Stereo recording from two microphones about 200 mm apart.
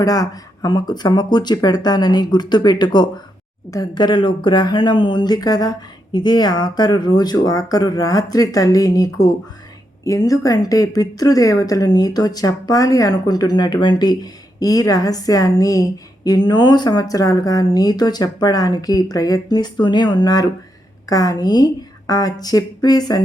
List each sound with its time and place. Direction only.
0.0 s a woman's voice: 20° left (ahead or behind)